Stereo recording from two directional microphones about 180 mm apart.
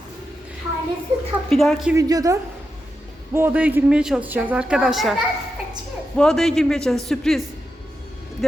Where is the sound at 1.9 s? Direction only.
20° right (ahead or behind).